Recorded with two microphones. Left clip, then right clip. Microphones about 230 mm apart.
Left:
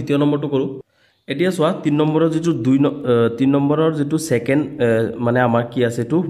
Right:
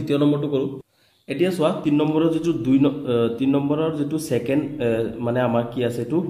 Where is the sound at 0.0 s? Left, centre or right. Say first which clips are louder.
Left 2 dB; left.